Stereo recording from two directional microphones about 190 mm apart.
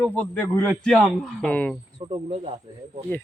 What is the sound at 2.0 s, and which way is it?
Speech, 30° right (ahead or behind).